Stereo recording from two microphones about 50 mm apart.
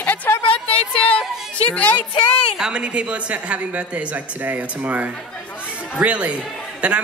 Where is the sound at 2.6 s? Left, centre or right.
Right.